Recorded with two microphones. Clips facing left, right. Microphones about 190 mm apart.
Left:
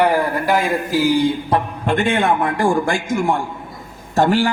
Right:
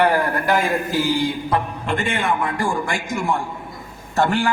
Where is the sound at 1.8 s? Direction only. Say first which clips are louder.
Left 5 dB; 65° left (ahead or behind).